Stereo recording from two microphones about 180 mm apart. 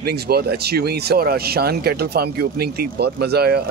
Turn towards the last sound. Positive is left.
turn(degrees=-60)  # may be behind; listen again after turning